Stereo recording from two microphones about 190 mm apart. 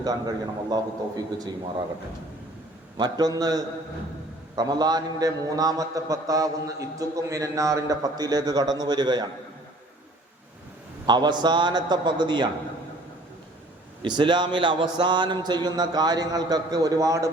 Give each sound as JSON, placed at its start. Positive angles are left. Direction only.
{"t": 0.0, "sound": "a man's voice", "side_deg": -20}
{"t": 3.0, "sound": "a man's voice", "side_deg": -20}
{"t": 11.0, "sound": "a man's voice", "side_deg": -25}
{"t": 14.0, "sound": "a man's voice", "side_deg": -25}